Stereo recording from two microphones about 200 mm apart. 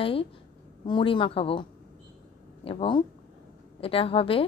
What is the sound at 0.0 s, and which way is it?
A woman's voice, 25° left (ahead or behind).